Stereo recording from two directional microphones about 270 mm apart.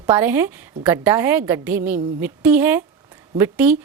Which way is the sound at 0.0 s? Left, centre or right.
Centre.